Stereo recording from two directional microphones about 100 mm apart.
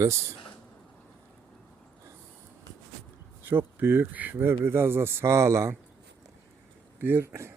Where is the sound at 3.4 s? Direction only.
20° right (ahead or behind).